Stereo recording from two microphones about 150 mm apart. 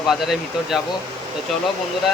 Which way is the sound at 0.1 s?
Centre (ahead or behind).